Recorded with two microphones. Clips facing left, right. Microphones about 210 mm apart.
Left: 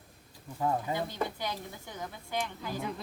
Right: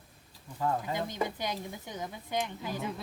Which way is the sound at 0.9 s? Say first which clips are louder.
Right 1 dB; 20° right (ahead or behind).